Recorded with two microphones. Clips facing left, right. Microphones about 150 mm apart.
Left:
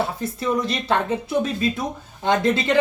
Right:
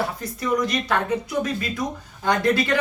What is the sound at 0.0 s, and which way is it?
Speech, 25° left (ahead or behind).